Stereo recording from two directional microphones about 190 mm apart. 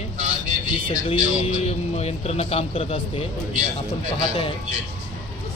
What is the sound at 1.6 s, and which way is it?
Speech, 35° left (ahead or behind).